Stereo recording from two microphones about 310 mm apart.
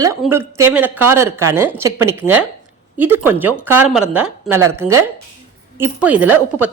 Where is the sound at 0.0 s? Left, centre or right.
Centre.